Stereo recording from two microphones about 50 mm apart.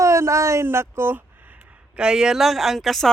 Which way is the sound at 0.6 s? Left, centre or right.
Right.